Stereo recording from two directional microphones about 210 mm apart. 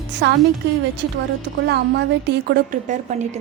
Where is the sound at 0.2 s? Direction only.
55° right (ahead or behind).